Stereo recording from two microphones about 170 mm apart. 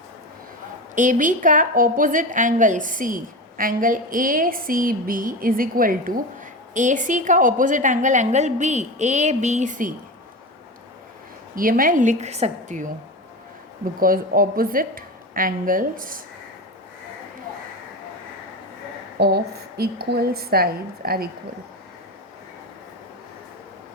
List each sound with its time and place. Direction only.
0.9 s a woman's voice: 50° right (ahead or behind)
11.5 s a woman's voice: 55° right (ahead or behind)
14.0 s a woman's voice: 55° right (ahead or behind)
19.2 s a woman's voice: 70° right (ahead or behind)